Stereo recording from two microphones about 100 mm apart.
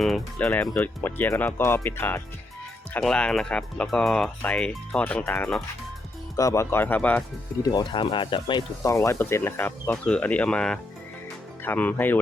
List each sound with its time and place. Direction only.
0.3 s speech: 15° left (ahead or behind)
3.0 s speech: 10° left (ahead or behind)
6.3 s speech: 35° left (ahead or behind); by 7.2 s 15° left (ahead or behind)
7.6 s speech: 45° left (ahead or behind)
8.8 s speech: 30° left (ahead or behind)